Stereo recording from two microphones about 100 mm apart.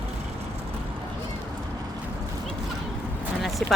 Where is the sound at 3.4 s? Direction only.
Centre (ahead or behind).